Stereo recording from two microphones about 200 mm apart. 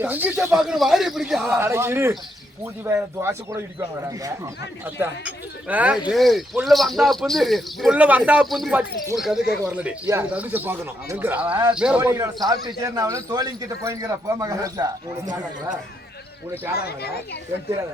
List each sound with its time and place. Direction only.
0.0 s speech: 5° right (ahead or behind)
1.5 s speech: 10° right (ahead or behind)
5.6 s speech: 5° right (ahead or behind)
12.0 s a man's voice: 15° right (ahead or behind)
16.7 s a child's voice: 50° left (ahead or behind)